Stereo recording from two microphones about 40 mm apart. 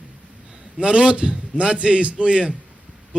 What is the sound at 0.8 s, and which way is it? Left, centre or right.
A man's voice, right.